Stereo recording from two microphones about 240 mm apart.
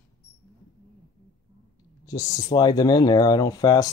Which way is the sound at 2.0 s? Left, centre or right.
Centre.